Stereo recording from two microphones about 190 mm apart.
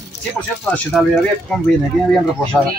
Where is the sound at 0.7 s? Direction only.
5° left (ahead or behind).